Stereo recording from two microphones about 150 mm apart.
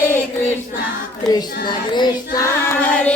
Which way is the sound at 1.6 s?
30° left (ahead or behind).